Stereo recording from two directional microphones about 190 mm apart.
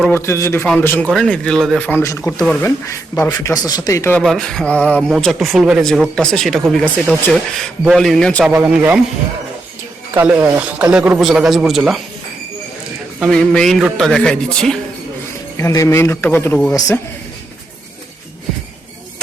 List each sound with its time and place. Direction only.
0.0 s a man's voice: 15° left (ahead or behind)
4.2 s speech: centre (ahead or behind)
7.9 s speech: centre (ahead or behind)
8.4 s speech: 10° right (ahead or behind)
10.2 s speech: 5° right (ahead or behind)
13.1 s speech: centre (ahead or behind)
15.5 s a man's voice: 15° left (ahead or behind)